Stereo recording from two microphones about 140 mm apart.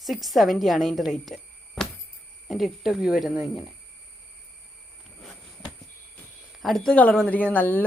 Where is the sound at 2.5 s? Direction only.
Centre (ahead or behind).